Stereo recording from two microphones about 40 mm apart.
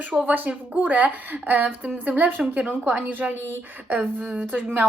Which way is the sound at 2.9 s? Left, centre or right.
Right.